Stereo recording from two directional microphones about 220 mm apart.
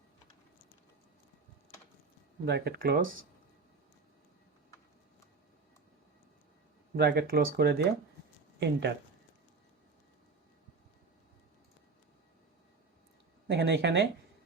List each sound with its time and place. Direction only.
2.4 s speech: 45° right (ahead or behind)
6.9 s speech: 45° right (ahead or behind)
13.5 s speech: 50° right (ahead or behind)